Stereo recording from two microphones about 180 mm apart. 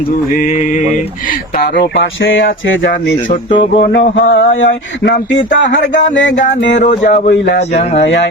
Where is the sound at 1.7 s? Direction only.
75° left (ahead or behind).